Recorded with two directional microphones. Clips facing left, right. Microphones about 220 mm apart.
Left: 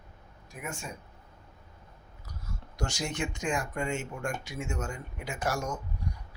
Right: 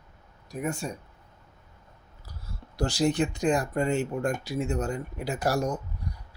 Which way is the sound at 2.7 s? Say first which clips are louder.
Right 9 dB; 35° right (ahead or behind).